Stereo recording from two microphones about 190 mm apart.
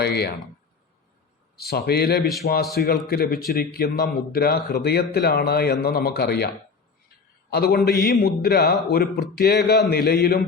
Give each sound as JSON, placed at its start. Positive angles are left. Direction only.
{"t": 0.0, "sound": "speech", "side_deg": 60}
{"t": 1.5, "sound": "speech", "side_deg": 55}
{"t": 7.5, "sound": "speech", "side_deg": 55}